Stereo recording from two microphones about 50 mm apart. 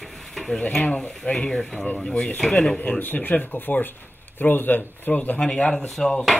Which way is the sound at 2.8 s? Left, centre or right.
Left.